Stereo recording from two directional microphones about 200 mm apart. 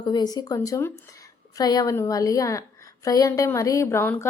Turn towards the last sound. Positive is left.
turn(degrees=10)  # may be behind; listen again after turning